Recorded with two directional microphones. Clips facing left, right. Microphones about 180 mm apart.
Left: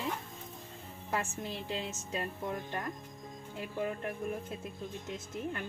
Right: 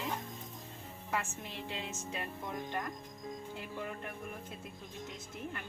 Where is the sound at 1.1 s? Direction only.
35° left (ahead or behind).